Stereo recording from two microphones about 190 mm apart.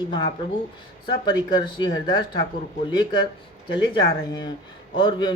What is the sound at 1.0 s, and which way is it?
A man's voice, 20° left (ahead or behind).